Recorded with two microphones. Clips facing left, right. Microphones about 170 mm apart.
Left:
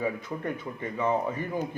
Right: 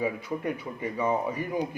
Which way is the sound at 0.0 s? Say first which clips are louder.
Right 1 dB; 10° right (ahead or behind).